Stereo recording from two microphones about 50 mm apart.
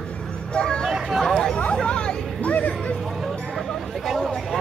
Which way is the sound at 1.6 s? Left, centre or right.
Centre.